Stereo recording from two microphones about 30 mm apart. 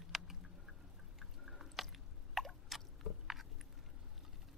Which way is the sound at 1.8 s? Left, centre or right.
Centre.